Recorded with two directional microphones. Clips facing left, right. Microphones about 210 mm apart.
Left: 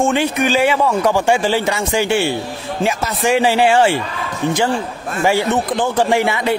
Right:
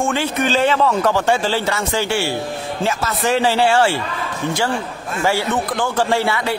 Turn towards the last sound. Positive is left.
turn(degrees=15)  # may be behind; listen again after turning